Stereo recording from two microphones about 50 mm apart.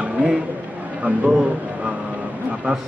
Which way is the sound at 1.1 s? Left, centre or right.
Right.